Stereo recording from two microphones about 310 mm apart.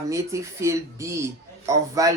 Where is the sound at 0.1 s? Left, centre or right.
Centre.